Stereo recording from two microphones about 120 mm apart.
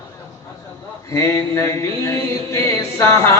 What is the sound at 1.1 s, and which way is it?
Speech, 25° left (ahead or behind).